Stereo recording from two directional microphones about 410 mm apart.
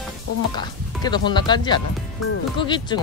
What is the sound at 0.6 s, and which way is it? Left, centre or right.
Speech, centre.